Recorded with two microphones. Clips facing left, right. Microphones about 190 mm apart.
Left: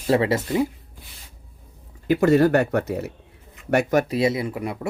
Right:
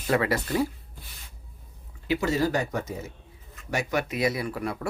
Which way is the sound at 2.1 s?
55° left (ahead or behind).